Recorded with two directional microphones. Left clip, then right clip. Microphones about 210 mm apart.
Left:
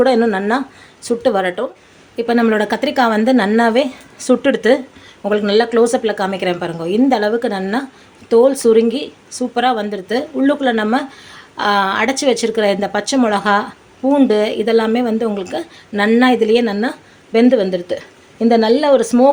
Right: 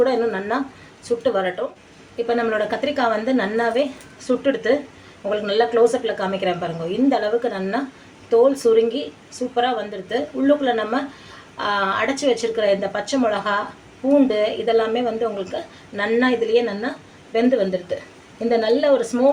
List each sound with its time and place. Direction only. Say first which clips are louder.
0.0 s a woman's voice: left 6 dB; 50° left (ahead or behind)